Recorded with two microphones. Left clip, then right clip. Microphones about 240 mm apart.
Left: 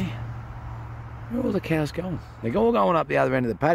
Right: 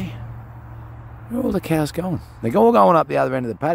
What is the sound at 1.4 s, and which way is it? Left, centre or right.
Speech, centre.